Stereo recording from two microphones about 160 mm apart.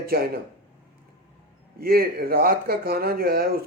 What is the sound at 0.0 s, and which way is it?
Speech, 75° right (ahead or behind).